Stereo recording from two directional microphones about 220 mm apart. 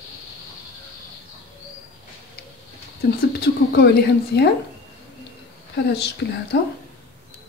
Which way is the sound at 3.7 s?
45° left (ahead or behind).